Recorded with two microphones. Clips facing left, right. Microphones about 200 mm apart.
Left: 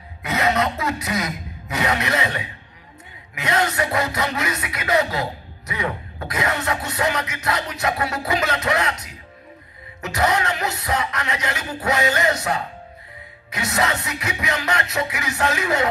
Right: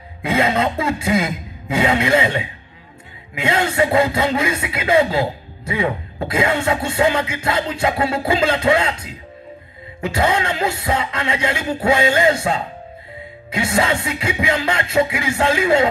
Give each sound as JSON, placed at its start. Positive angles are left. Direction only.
{"t": 0.2, "sound": "speech", "side_deg": -30}